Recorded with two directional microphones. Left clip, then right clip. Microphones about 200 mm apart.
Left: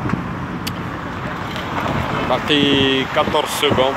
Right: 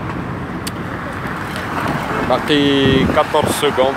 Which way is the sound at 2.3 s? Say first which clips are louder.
Right 1 dB; 15° right (ahead or behind).